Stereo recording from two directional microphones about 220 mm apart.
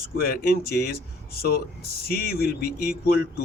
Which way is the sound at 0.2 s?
45° left (ahead or behind).